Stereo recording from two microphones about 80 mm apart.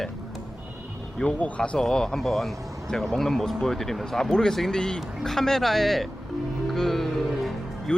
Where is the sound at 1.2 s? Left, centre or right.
Centre.